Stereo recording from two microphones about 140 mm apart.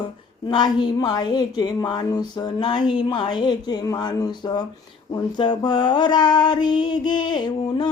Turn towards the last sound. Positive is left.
turn(degrees=35)  # may be behind; listen again after turning